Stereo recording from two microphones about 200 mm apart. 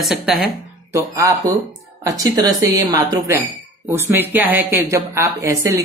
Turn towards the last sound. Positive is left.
turn(degrees=-15)  # may be behind; listen again after turning